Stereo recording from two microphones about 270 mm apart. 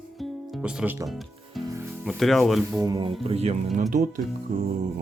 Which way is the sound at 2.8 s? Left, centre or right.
Centre.